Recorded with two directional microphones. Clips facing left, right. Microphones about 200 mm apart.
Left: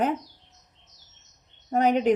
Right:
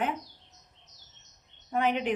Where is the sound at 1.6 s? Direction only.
40° left (ahead or behind).